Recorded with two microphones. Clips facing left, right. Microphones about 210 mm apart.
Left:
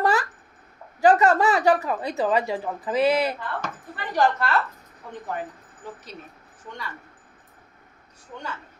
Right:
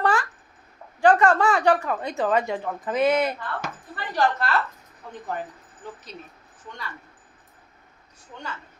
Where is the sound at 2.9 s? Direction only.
30° left (ahead or behind).